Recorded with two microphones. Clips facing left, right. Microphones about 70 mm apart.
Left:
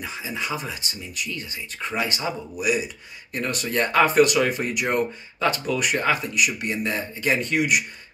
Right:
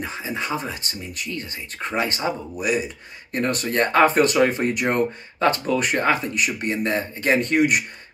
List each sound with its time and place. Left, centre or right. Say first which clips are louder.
0.0 s speech: right 2 dB; right